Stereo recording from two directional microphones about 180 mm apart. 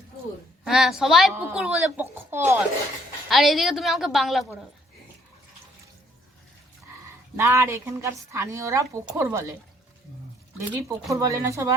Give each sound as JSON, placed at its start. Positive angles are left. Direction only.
{"t": 0.6, "sound": "a woman's voice", "side_deg": -5}
{"t": 3.2, "sound": "a woman's voice", "side_deg": 0}
{"t": 7.3, "sound": "a woman's voice", "side_deg": -15}
{"t": 10.7, "sound": "a woman's voice", "side_deg": -15}